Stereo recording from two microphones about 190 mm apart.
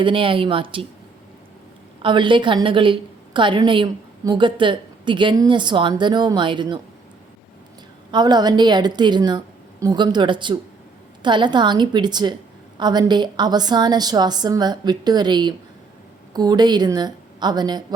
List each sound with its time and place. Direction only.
0.0 s a woman's voice: 25° right (ahead or behind)
2.0 s a woman's voice: 25° right (ahead or behind)
8.1 s a woman's voice: 20° right (ahead or behind)